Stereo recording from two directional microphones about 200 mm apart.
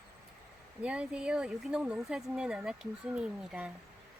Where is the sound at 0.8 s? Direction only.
5° right (ahead or behind).